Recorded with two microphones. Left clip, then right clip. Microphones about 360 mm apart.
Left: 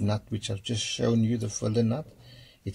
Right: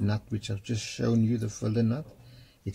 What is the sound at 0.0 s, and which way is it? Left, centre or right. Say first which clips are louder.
Speech: left 2 dB; left.